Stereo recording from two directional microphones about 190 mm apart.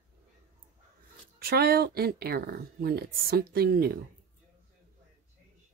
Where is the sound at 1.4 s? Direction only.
55° right (ahead or behind).